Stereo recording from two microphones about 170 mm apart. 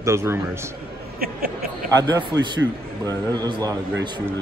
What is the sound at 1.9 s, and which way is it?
Speech, 20° right (ahead or behind).